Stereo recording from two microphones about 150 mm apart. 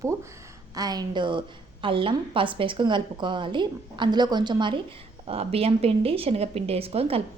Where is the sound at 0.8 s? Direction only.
25° right (ahead or behind).